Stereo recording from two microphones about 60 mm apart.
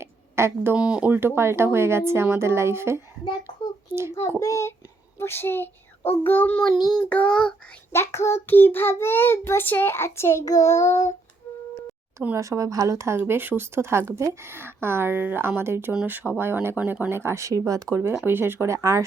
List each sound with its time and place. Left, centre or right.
0.0 s a sound: right
0.8 s speech: centre
1.1 s speech: right
4.4 s child singing: left
5.2 s a child's voice: left
7.0 s child singing: left
7.9 s child singing: left
8.4 s a child's voice: left
10.4 s child singing: left
12.4 s speech: right
13.1 s speech: right
16.0 s speech: right
18.3 s speech: right
18.7 s speech: right